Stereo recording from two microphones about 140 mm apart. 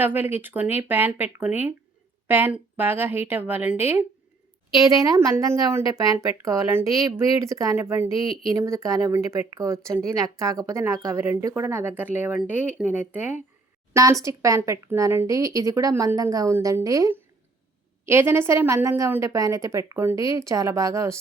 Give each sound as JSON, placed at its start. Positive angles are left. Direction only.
{"t": 0.0, "sound": "a woman's voice", "side_deg": -15}
{"t": 5.0, "sound": "a woman's voice", "side_deg": -25}